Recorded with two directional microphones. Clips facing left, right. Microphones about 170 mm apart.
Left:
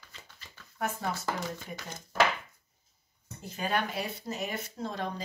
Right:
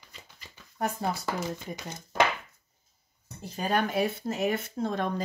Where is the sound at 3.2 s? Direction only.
35° right (ahead or behind).